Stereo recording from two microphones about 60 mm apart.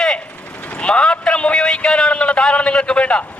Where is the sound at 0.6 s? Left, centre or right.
Centre.